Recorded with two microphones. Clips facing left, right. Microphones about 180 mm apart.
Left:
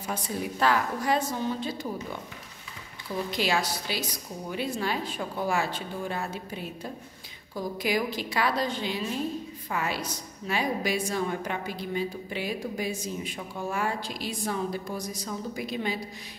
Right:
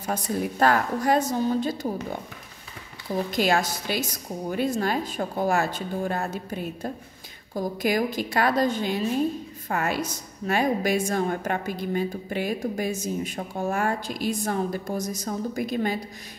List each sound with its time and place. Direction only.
0.0 s a woman's voice: 45° right (ahead or behind)
3.3 s a woman's voice: 45° right (ahead or behind)